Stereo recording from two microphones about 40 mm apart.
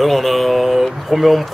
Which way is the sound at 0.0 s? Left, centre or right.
Centre.